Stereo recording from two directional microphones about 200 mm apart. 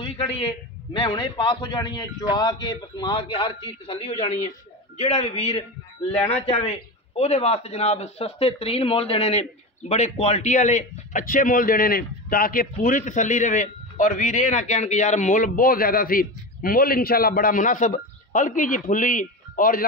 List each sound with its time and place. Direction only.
0.0 s a man's voice: 25° left (ahead or behind); by 19.9 s 45° left (ahead or behind)